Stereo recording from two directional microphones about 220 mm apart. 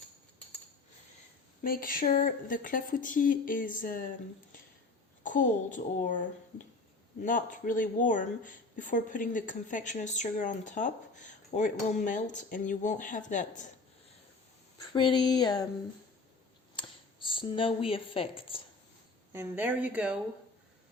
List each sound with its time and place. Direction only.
1.6 s speech: 40° left (ahead or behind)
5.2 s speech: 35° left (ahead or behind)
7.2 s speech: 35° left (ahead or behind)
14.9 s a sound: 20° left (ahead or behind)
16.7 s speech: 20° left (ahead or behind)
19.3 s a woman's voice: 10° right (ahead or behind)